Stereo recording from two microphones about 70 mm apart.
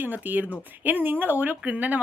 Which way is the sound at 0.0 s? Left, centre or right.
Right.